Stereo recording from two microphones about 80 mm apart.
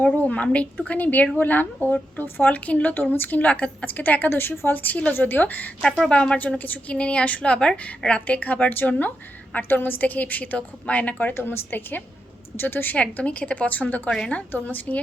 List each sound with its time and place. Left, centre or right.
0.0 s a woman's voice: centre